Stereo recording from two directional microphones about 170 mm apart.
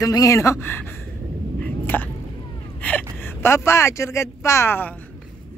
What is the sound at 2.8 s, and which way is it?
Speech, 10° left (ahead or behind).